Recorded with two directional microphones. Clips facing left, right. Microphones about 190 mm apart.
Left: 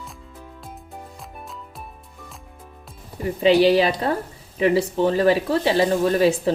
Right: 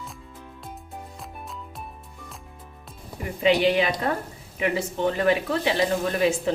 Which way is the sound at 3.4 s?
35° left (ahead or behind).